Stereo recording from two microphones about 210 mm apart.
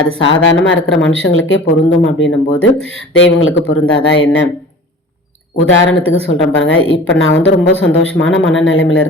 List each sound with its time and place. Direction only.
0.2 s speech: 65° left (ahead or behind)
5.5 s speech: 65° left (ahead or behind)